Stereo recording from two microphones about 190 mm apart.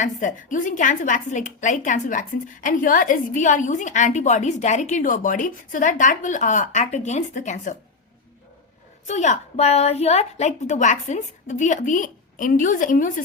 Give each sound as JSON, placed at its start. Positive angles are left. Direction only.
{"t": 0.0, "sound": "a woman's voice", "side_deg": 40}
{"t": 9.0, "sound": "a woman's voice", "side_deg": 35}